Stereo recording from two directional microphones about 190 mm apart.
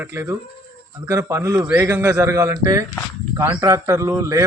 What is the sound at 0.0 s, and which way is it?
Speech, 15° right (ahead or behind).